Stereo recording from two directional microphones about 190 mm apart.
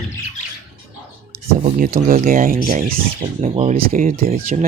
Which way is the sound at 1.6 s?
45° right (ahead or behind).